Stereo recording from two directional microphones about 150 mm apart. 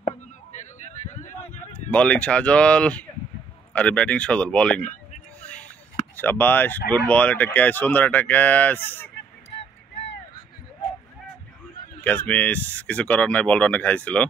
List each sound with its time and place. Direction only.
0.0 s a sound: 55° left (ahead or behind)
1.9 s speech: 10° left (ahead or behind)
6.1 s speech: 15° left (ahead or behind)
12.0 s speech: 10° left (ahead or behind)